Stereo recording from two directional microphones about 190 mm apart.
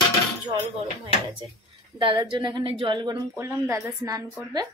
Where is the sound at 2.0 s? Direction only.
25° right (ahead or behind).